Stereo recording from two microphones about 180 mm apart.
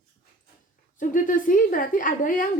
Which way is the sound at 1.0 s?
45° left (ahead or behind).